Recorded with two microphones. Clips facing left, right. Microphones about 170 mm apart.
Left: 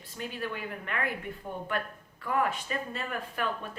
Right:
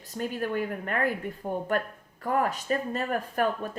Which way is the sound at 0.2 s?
45° right (ahead or behind).